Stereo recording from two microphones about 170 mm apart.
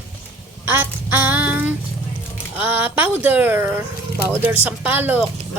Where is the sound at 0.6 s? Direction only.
15° right (ahead or behind).